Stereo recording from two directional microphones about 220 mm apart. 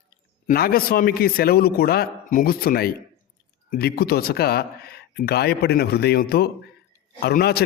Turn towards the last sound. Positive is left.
turn(degrees=45)  # may be behind; listen again after turning